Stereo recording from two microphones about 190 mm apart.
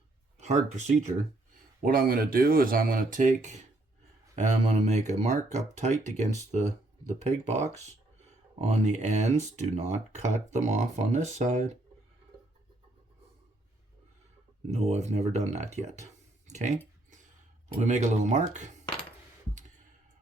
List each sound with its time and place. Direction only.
0.3 s speech: 35° right (ahead or behind)
1.8 s speech: 50° right (ahead or behind)
14.7 s speech: 35° right (ahead or behind)
16.5 s a sound: 40° right (ahead or behind)
17.7 s speech: 40° right (ahead or behind)